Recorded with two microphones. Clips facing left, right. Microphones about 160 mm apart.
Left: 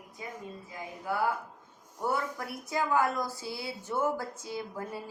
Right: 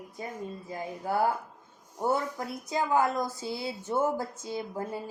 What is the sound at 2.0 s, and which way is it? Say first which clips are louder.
A woman's voice: right 3 dB; 25° right (ahead or behind).